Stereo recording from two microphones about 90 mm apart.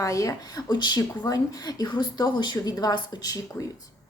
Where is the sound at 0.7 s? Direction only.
55° left (ahead or behind).